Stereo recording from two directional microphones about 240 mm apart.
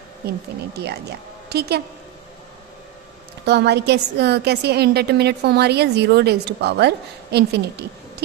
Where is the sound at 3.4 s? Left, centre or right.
Right.